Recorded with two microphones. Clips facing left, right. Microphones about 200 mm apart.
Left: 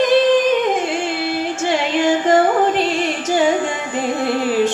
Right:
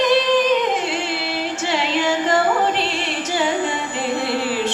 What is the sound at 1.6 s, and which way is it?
Music, 50° left (ahead or behind).